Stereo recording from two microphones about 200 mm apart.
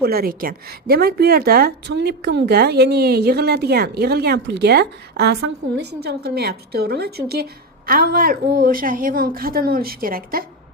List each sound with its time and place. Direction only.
0.0 s a woman's voice: 50° right (ahead or behind)